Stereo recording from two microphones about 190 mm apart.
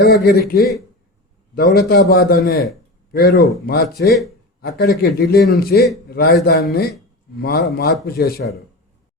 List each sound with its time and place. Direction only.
0.0 s a man's voice: 60° left (ahead or behind)